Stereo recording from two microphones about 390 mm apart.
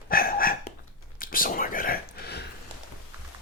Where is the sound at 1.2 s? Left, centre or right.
Left.